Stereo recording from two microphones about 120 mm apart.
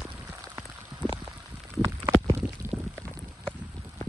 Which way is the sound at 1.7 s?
25° right (ahead or behind).